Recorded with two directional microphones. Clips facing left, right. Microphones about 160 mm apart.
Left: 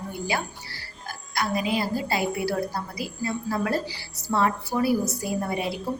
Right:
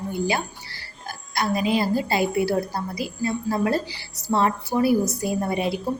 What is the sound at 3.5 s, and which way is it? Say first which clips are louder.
Speech: right 2 dB; 25° right (ahead or behind).